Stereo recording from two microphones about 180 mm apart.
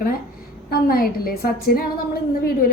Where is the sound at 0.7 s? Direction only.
55° left (ahead or behind).